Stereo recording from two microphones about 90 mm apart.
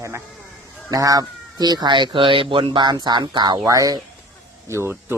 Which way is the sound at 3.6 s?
40° right (ahead or behind).